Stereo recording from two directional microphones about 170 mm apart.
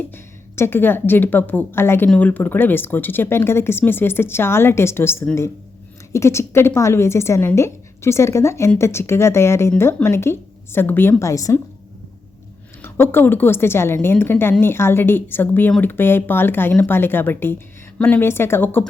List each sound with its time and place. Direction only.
0.1 s a woman's voice: 15° left (ahead or behind)
12.8 s speech: 15° left (ahead or behind)